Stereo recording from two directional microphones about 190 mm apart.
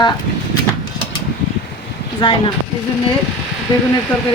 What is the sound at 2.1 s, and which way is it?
Speech, 25° left (ahead or behind).